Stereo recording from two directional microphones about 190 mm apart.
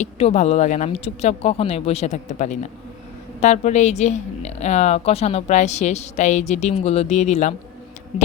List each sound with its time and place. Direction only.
0.0 s a woman's voice: 35° left (ahead or behind)